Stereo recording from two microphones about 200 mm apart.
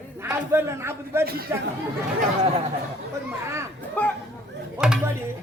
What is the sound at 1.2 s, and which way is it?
Speech, 50° right (ahead or behind).